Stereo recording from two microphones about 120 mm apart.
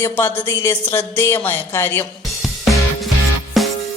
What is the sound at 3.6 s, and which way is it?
Music, centre (ahead or behind).